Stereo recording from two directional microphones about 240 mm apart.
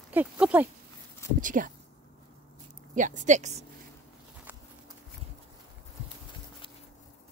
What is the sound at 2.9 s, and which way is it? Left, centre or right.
Speech, right.